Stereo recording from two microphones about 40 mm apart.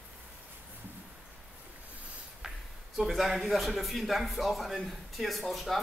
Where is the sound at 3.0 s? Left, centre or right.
Centre.